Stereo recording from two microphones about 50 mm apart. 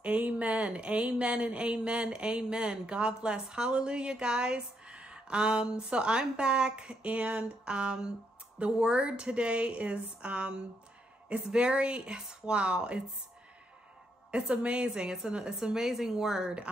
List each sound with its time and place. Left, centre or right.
0.0 s speech: right
14.3 s a woman's voice: right; by 16.5 s centre